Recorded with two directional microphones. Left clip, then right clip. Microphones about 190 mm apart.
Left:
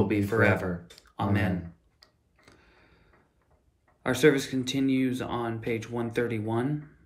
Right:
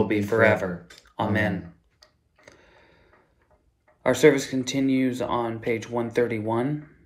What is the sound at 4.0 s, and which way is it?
Speech, 35° right (ahead or behind).